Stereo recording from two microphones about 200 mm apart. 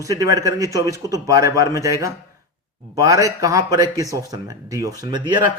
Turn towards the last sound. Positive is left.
turn(degrees=-25)  # may be behind; listen again after turning